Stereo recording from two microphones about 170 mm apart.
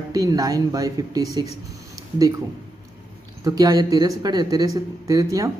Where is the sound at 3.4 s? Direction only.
20° right (ahead or behind).